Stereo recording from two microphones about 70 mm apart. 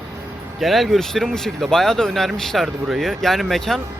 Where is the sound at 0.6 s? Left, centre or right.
Centre.